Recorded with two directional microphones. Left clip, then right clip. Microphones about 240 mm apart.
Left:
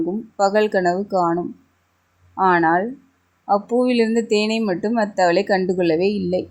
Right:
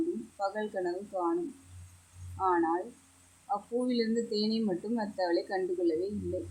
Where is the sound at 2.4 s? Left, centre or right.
Left.